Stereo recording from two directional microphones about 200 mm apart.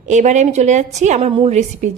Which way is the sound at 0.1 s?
35° right (ahead or behind).